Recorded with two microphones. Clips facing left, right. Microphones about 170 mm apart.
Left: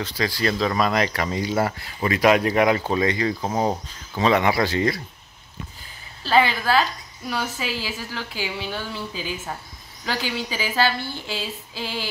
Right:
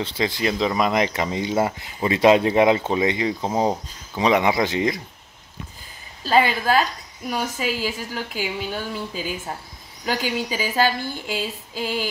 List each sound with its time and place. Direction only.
0.0 s speech: 25° right (ahead or behind)
6.2 s a woman's voice: 40° right (ahead or behind)
7.5 s a woman's voice: 45° right (ahead or behind)